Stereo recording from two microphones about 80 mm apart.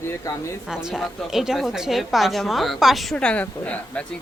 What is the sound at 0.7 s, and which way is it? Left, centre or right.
A woman's voice, centre.